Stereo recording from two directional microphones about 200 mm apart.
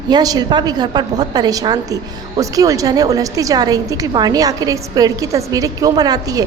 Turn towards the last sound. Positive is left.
turn(degrees=-20)  # may be behind; listen again after turning